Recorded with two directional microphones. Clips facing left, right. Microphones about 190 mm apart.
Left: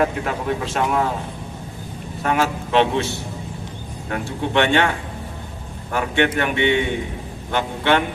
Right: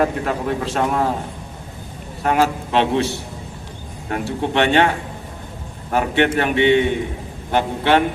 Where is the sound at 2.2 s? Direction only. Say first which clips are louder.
Right 3 dB; 35° right (ahead or behind).